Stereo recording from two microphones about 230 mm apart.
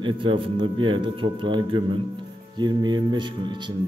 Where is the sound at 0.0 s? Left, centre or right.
Right.